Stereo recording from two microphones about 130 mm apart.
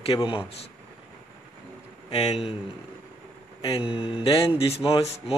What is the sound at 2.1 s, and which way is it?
Speech, 50° left (ahead or behind).